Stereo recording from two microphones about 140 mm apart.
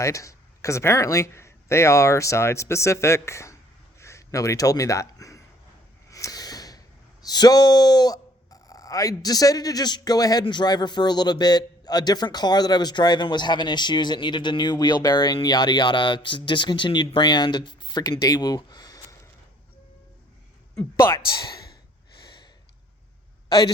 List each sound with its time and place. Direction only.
0.0 s speech: 20° left (ahead or behind)
6.1 s a sound: 25° left (ahead or behind)
10.4 s a man's voice: 30° left (ahead or behind)